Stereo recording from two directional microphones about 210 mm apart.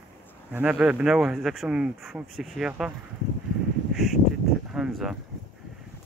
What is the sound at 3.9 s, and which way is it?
Duck, centre (ahead or behind).